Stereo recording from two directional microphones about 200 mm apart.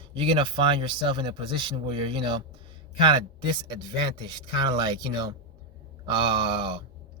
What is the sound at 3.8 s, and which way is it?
Speech, 20° right (ahead or behind).